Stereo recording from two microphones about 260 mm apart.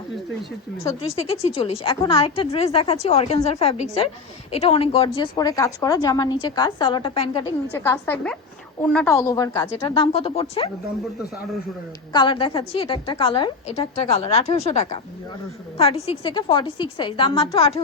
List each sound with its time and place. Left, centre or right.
0.9 s a woman's voice: left
12.1 s a woman's voice: centre